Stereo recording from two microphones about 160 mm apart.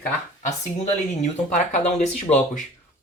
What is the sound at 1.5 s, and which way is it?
Speech, 45° left (ahead or behind).